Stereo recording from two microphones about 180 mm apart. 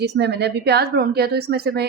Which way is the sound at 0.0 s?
70° right (ahead or behind).